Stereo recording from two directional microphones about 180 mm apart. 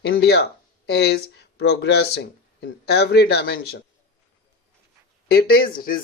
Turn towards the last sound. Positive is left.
turn(degrees=55)  # may be behind; listen again after turning